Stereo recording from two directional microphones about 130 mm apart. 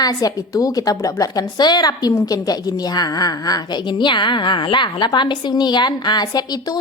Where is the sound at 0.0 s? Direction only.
30° left (ahead or behind).